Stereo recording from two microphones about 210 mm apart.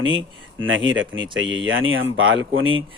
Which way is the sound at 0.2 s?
65° right (ahead or behind).